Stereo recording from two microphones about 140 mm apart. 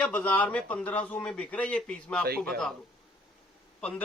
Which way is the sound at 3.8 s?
10° left (ahead or behind).